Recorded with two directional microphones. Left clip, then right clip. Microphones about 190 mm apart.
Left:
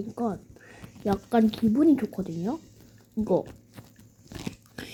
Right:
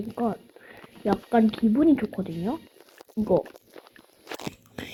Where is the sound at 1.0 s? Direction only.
15° left (ahead or behind).